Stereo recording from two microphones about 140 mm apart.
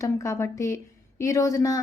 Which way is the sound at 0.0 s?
20° left (ahead or behind).